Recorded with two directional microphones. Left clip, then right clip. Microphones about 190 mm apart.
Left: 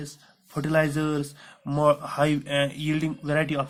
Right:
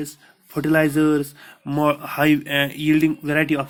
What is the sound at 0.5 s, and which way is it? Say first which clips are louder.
Speech: right 6 dB; 20° right (ahead or behind).